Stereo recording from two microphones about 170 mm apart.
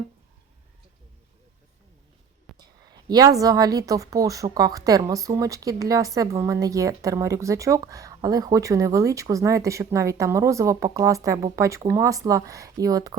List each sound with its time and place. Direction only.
2.6 s a woman's voice: 25° right (ahead or behind)